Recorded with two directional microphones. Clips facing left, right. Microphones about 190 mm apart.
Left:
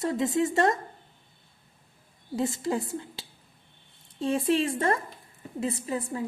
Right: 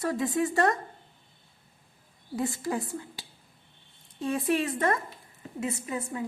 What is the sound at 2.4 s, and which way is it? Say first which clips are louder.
A woman's voice: left 2 dB; 25° left (ahead or behind).